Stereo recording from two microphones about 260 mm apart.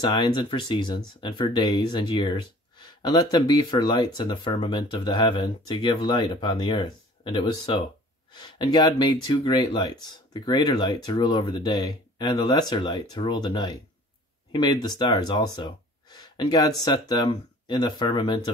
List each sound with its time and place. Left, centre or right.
0.0 s speech: centre